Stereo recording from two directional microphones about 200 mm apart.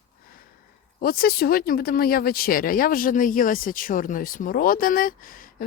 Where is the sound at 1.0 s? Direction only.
50° left (ahead or behind).